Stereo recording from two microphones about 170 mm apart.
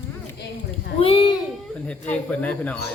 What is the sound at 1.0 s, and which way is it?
Speech, 35° left (ahead or behind).